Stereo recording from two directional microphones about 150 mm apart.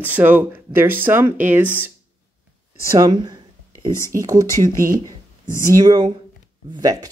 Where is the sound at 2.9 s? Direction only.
25° right (ahead or behind).